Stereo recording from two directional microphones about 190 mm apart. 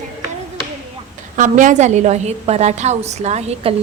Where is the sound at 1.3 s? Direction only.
40° right (ahead or behind).